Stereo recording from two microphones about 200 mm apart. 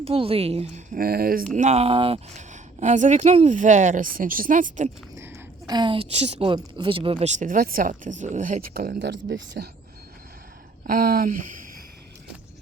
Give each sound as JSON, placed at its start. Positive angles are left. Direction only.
{"t": 0.0, "sound": "a woman's voice", "side_deg": -30}
{"t": 0.9, "sound": "speech", "side_deg": -50}
{"t": 1.5, "sound": "a woman's voice", "side_deg": -35}
{"t": 5.2, "sound": "a woman's voice", "side_deg": -15}
{"t": 10.8, "sound": "speech", "side_deg": -45}